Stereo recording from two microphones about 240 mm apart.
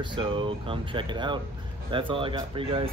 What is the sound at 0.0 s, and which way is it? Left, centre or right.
Speech, centre.